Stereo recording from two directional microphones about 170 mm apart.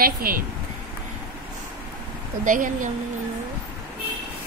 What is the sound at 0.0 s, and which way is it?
Speech, 60° right (ahead or behind).